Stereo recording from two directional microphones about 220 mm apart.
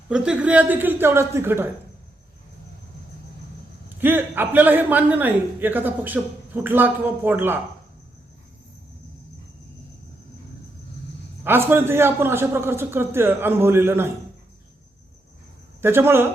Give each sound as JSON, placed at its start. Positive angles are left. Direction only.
{"t": 0.1, "sound": "a man's voice", "side_deg": -5}
{"t": 3.8, "sound": "a man's voice", "side_deg": -10}
{"t": 11.4, "sound": "a man's voice", "side_deg": -10}
{"t": 15.8, "sound": "a man's voice", "side_deg": -10}